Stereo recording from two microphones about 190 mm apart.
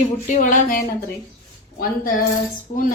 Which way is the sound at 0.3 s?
40° left (ahead or behind).